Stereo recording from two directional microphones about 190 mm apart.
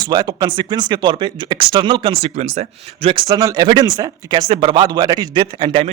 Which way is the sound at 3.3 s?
20° right (ahead or behind).